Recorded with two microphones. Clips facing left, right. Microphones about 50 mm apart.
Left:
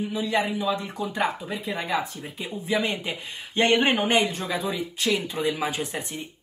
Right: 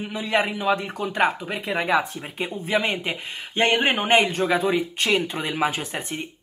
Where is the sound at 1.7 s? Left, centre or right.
Right.